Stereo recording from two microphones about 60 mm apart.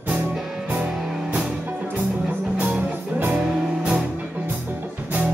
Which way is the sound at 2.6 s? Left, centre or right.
Right.